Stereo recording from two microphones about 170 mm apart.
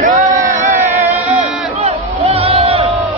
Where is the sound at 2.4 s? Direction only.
35° right (ahead or behind).